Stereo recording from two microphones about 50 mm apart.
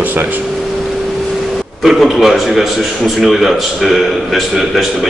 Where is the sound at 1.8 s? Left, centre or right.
Centre.